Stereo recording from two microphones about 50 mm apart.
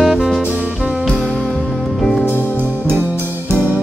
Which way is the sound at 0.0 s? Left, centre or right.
Centre.